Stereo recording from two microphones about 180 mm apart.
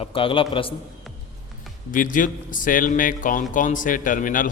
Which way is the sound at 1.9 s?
50° left (ahead or behind).